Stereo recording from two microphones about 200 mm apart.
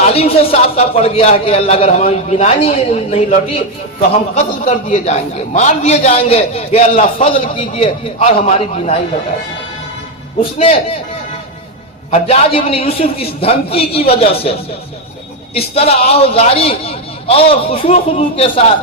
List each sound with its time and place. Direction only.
0.1 s a man's voice: 30° left (ahead or behind)
4.4 s a man's voice: 35° left (ahead or behind)
10.6 s a man's voice: 30° left (ahead or behind)
12.1 s a man's voice: 30° left (ahead or behind)
15.5 s a man's voice: 30° left (ahead or behind)